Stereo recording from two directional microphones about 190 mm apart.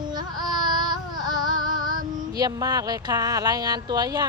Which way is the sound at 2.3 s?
20° right (ahead or behind).